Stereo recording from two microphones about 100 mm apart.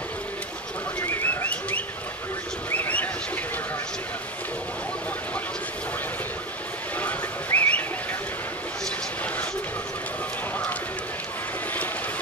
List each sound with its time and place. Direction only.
1.0 s bird: 20° left (ahead or behind)
2.7 s a sound: 15° left (ahead or behind)
7.0 s whistling: 15° left (ahead or behind)